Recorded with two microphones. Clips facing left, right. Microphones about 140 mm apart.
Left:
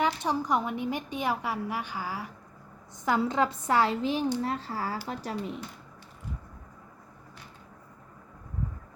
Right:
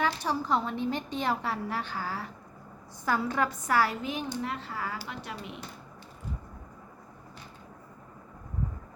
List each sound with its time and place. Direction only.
0.0 s a woman's voice: 20° left (ahead or behind); by 5.5 s 40° left (ahead or behind)